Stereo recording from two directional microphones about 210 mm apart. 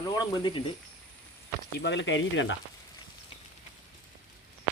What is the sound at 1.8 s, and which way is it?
Speech, 60° left (ahead or behind).